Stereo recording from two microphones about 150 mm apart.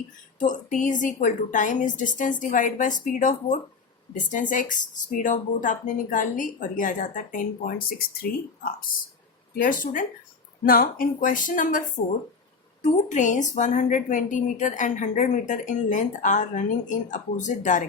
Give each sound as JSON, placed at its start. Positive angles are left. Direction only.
{"t": 0.3, "sound": "a woman's voice", "side_deg": 55}
{"t": 9.6, "sound": "a woman's voice", "side_deg": 65}
{"t": 10.7, "sound": "a woman's voice", "side_deg": 75}
{"t": 12.8, "sound": "a woman's voice", "side_deg": 55}